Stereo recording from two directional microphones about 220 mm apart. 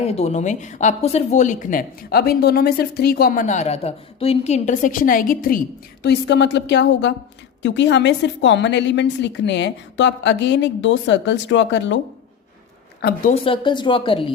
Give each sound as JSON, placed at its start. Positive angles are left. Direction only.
{"t": 0.0, "sound": "a woman's voice", "side_deg": 30}
{"t": 13.0, "sound": "a woman's voice", "side_deg": 45}
{"t": 13.3, "sound": "speech", "side_deg": 25}